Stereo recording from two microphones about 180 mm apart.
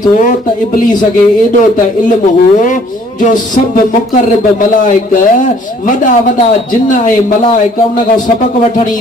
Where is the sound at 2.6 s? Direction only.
45° left (ahead or behind).